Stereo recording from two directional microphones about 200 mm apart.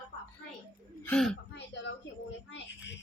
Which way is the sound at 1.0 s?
5° left (ahead or behind).